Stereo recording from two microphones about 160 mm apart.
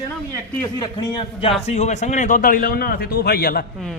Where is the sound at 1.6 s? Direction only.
45° left (ahead or behind); by 3.7 s 70° left (ahead or behind).